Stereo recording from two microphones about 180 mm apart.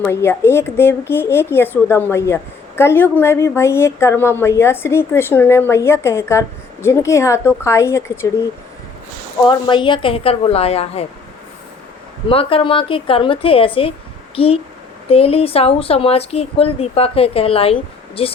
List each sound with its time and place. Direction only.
0.0 s a woman's voice: 15° left (ahead or behind)
9.5 s speech: 25° left (ahead or behind)
12.3 s speech: 30° left (ahead or behind)